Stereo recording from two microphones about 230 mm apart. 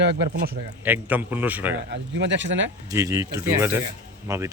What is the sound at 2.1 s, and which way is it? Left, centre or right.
Speech, right.